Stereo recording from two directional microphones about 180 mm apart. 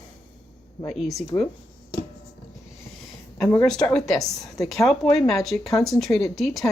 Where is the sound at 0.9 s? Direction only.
Centre (ahead or behind).